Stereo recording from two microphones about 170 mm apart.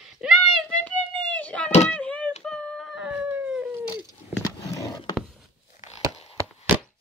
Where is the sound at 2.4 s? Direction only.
5° left (ahead or behind).